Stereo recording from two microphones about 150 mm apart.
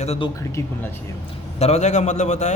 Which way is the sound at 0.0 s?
45° left (ahead or behind).